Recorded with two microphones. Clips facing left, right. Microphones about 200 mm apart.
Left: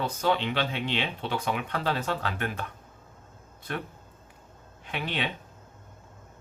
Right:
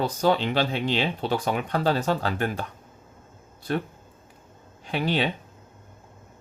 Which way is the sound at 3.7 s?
35° right (ahead or behind).